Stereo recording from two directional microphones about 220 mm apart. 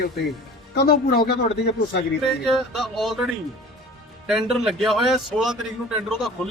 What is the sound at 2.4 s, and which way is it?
Speech, centre (ahead or behind).